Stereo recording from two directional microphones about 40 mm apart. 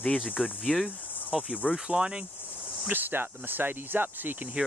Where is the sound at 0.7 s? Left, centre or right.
Left.